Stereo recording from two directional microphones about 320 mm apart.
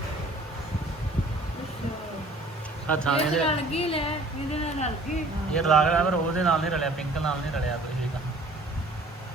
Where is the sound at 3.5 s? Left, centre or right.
Centre.